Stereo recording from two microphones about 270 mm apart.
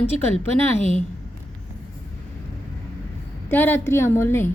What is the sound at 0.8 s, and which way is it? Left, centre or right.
Speech, left.